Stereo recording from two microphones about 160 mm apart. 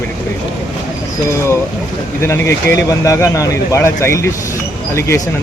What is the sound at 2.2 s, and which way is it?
Speech, 15° left (ahead or behind).